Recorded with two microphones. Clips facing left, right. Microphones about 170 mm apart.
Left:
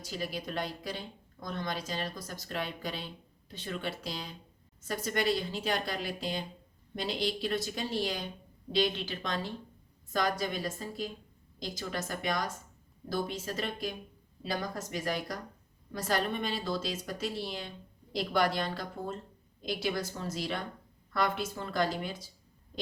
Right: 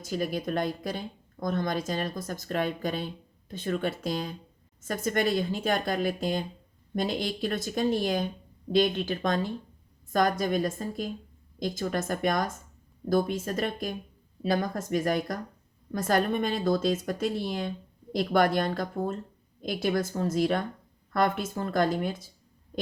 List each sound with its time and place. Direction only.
0.0 s a woman's voice: 50° right (ahead or behind)